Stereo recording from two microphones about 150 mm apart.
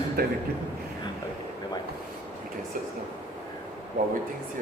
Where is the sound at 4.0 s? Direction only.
60° right (ahead or behind).